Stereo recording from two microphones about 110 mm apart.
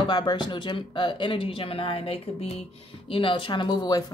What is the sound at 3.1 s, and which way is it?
Speech, 50° left (ahead or behind).